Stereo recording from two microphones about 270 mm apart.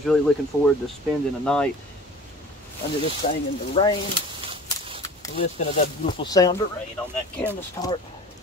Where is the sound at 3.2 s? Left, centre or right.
Left.